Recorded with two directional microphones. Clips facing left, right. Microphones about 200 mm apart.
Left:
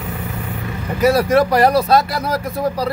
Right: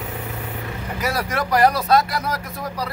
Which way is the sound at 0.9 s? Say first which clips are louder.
Left 12 dB; 25° left (ahead or behind).